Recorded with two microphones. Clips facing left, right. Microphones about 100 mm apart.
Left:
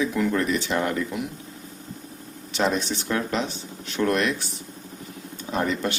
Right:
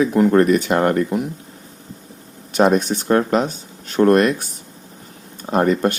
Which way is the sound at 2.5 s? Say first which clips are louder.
Right 9 dB; 50° right (ahead or behind).